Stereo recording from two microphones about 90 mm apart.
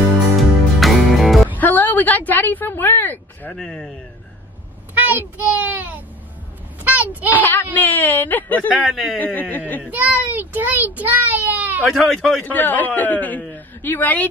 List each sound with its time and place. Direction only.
0.0 s music: centre (ahead or behind)
1.6 s speech: 20° left (ahead or behind)
4.9 s a child's voice: 20° right (ahead or behind)
6.8 s a sound: 20° right (ahead or behind)
7.2 s a woman's voice: 20° left (ahead or behind)
8.8 s speech: 5° right (ahead or behind)
9.2 s a woman's voice: 20° left (ahead or behind)
9.8 s a child's voice: 20° right (ahead or behind)
11.8 s speech: centre (ahead or behind)
12.4 s a man's voice: 20° left (ahead or behind)